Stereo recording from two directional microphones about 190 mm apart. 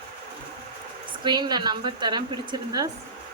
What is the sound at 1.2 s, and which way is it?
Speech, 25° right (ahead or behind).